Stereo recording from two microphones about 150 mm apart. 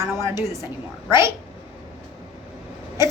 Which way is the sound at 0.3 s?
20° right (ahead or behind).